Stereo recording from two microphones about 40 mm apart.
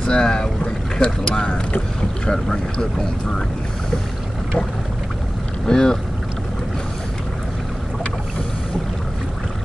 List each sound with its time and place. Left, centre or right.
0.0 s speech: left
5.7 s speech: centre